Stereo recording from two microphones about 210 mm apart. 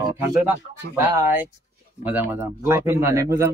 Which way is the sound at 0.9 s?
10° right (ahead or behind).